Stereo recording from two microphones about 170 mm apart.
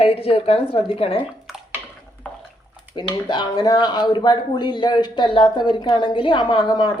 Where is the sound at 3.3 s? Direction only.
25° left (ahead or behind).